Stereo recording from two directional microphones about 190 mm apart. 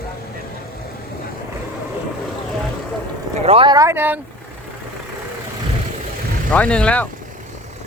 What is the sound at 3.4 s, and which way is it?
Speech, 25° right (ahead or behind).